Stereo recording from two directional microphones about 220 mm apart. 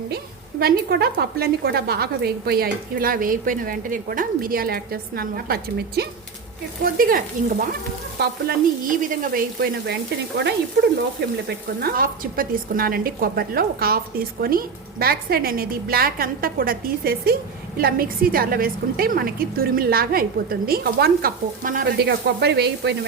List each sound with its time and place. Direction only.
0.6 s a woman's voice: 45° right (ahead or behind)
11.4 s a woman's voice: 45° right (ahead or behind)